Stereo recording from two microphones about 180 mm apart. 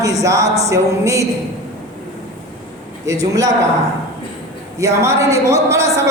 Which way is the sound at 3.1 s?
20° right (ahead or behind).